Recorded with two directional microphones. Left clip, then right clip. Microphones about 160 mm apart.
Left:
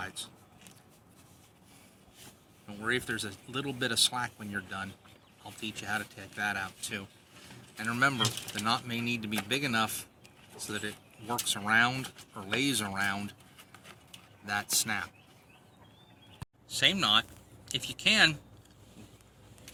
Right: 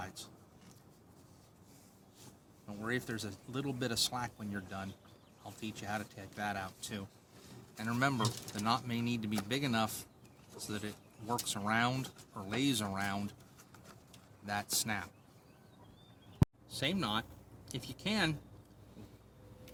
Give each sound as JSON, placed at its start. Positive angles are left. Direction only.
{"t": 0.0, "sound": "a sound", "side_deg": -50}
{"t": 2.6, "sound": "speech", "side_deg": -45}
{"t": 14.4, "sound": "speech", "side_deg": -60}
{"t": 16.6, "sound": "speech", "side_deg": -35}